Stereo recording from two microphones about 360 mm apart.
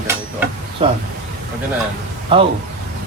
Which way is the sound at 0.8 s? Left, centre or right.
Centre.